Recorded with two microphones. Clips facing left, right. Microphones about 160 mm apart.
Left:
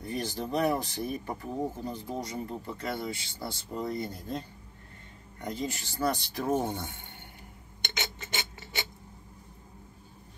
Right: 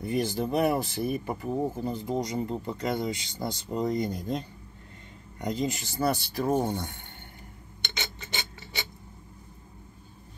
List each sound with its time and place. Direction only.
0.0 s speech: 10° right (ahead or behind); by 6.9 s 5° left (ahead or behind)